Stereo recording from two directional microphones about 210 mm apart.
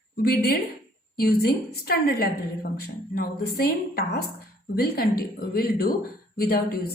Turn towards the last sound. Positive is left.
turn(degrees=45)  # may be behind; listen again after turning